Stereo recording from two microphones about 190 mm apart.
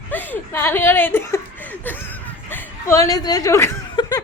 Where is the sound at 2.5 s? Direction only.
10° left (ahead or behind).